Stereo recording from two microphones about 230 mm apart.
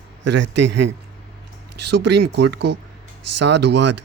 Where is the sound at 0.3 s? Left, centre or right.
Right.